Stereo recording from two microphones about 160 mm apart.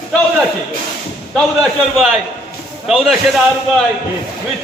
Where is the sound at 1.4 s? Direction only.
Centre (ahead or behind).